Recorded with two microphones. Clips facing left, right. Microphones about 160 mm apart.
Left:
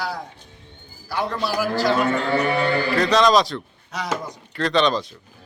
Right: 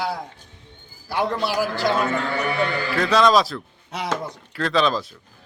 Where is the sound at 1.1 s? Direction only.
25° right (ahead or behind).